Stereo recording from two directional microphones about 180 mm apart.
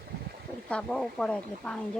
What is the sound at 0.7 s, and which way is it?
Speech, 5° left (ahead or behind).